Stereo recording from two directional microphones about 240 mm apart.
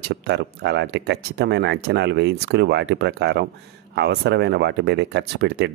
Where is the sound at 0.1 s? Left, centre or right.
Right.